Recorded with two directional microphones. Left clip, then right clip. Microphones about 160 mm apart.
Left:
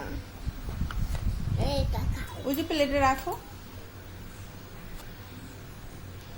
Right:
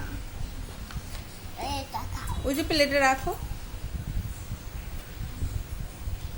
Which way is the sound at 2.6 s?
45° right (ahead or behind).